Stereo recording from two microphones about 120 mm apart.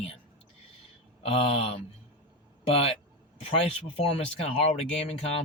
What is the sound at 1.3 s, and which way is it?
Speech, 55° left (ahead or behind).